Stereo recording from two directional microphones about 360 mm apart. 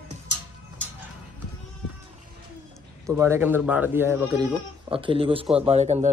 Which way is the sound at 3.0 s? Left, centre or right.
Centre.